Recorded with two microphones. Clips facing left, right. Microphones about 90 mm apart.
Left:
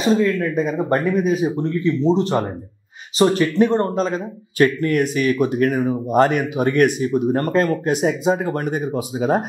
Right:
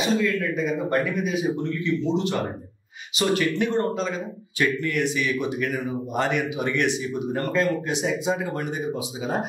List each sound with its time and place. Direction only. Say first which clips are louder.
0.0 s a man's voice: left 5 dB; 40° left (ahead or behind)